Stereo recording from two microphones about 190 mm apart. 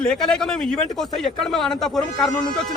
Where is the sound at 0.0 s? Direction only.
5° left (ahead or behind).